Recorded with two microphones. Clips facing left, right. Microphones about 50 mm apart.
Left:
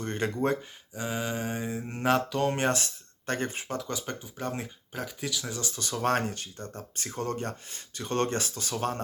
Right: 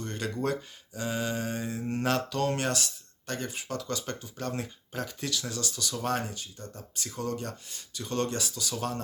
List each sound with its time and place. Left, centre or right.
0.0 s a sound: left
0.9 s mantra: centre
3.8 s mantra: centre
4.9 s mantra: centre
5.5 s speech: left
6.0 s speech: left